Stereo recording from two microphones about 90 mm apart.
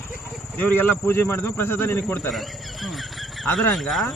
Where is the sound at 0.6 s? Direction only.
20° left (ahead or behind).